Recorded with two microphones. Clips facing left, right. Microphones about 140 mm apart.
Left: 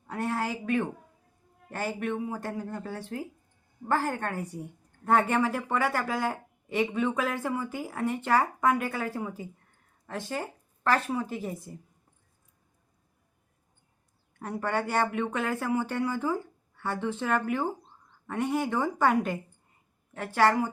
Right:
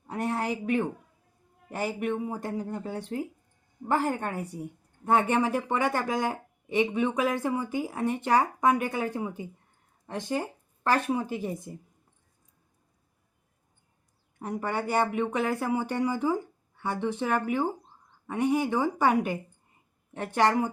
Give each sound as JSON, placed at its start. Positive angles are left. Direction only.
{"t": 0.1, "sound": "a sound", "side_deg": -25}
{"t": 1.7, "sound": "a woman's voice", "side_deg": -15}
{"t": 14.3, "sound": "a woman's voice", "side_deg": -15}